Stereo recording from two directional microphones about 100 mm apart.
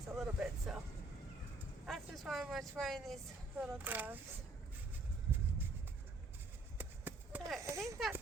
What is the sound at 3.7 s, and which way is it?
Speech, 20° right (ahead or behind).